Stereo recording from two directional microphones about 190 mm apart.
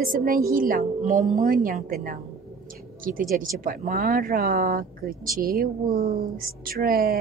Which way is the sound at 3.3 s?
45° right (ahead or behind).